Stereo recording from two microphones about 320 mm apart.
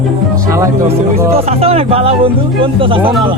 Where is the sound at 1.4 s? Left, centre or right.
Centre.